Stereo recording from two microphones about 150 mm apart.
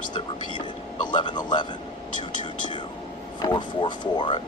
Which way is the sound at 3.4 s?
30° left (ahead or behind).